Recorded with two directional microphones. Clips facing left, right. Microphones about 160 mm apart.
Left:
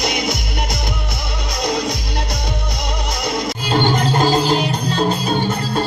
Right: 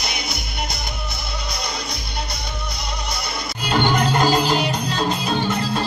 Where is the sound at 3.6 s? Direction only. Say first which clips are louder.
Left 1 dB; 30° left (ahead or behind).